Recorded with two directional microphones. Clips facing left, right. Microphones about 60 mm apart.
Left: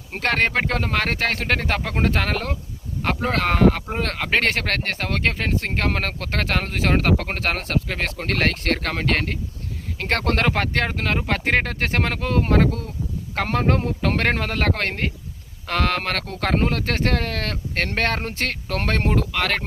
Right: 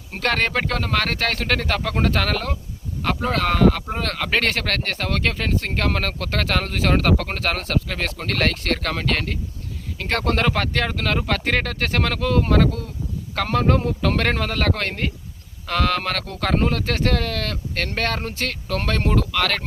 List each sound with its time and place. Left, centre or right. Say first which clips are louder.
0.1 s speech: left 1 dB; left